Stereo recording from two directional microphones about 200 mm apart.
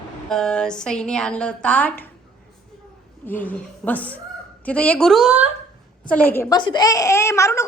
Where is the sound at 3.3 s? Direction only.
10° left (ahead or behind).